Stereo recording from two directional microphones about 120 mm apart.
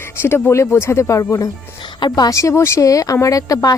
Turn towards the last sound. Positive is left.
turn(degrees=30)  # may be behind; listen again after turning